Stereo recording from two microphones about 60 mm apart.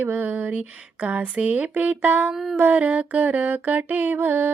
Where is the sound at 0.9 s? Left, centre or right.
Right.